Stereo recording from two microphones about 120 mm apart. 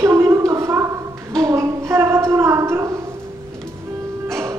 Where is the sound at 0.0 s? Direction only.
20° right (ahead or behind).